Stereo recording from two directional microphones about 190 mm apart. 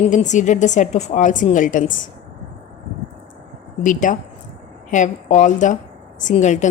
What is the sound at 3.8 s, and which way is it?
A woman's voice, 45° left (ahead or behind).